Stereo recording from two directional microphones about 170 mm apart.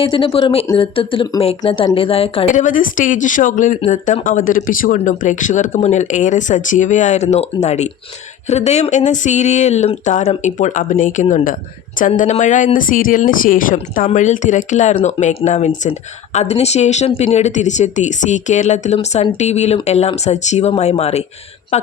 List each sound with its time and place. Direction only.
0.0 s speech: 30° left (ahead or behind)
2.6 s speech: 50° left (ahead or behind)